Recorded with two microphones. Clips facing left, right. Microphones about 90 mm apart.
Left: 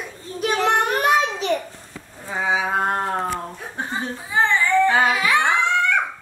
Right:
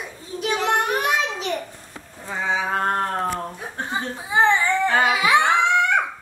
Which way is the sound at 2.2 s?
10° left (ahead or behind).